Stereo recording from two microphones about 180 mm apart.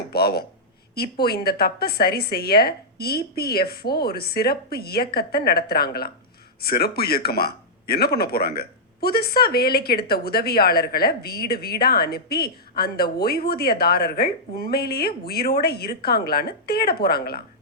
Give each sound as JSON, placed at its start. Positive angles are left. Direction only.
{"t": 0.1, "sound": "speech", "side_deg": 60}